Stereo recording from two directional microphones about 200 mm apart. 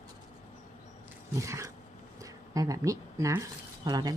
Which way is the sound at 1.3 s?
15° right (ahead or behind).